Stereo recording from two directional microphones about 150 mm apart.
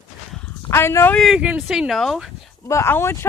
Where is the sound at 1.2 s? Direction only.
5° right (ahead or behind).